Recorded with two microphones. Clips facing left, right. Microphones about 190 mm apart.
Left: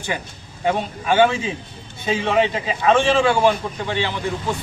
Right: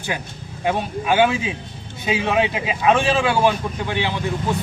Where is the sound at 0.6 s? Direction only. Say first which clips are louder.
Even; 10° right (ahead or behind).